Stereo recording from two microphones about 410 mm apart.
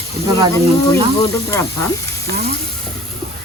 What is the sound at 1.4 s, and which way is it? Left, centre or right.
Speech, centre.